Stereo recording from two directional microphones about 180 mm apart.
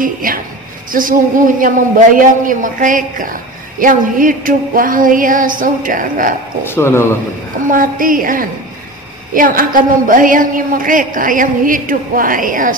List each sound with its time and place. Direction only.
0.0 s a woman's voice: 50° right (ahead or behind)
6.6 s speech: 15° left (ahead or behind)
7.7 s a woman's voice: 50° right (ahead or behind)